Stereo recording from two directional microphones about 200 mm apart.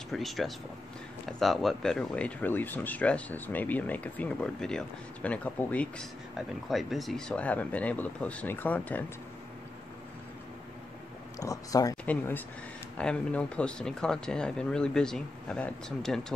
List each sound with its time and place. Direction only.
0.1 s speech: centre (ahead or behind)
11.3 s speech: 15° left (ahead or behind)